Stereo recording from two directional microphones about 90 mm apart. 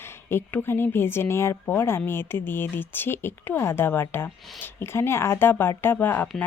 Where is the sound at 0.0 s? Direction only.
25° left (ahead or behind).